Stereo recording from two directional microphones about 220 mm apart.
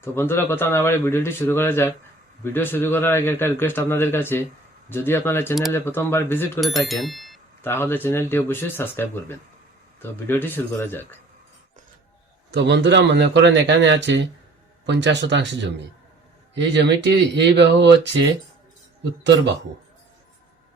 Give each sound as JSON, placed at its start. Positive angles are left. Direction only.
{"t": 0.0, "sound": "a man's voice", "side_deg": 10}
{"t": 12.5, "sound": "a man's voice", "side_deg": -50}
{"t": 16.6, "sound": "a man's voice", "side_deg": -50}
{"t": 19.2, "sound": "a man's voice", "side_deg": -55}